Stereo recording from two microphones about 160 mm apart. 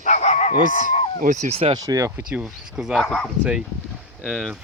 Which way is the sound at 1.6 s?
25° right (ahead or behind).